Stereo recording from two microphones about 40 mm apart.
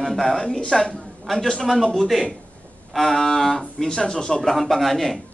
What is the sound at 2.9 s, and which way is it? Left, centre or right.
A man's voice, centre.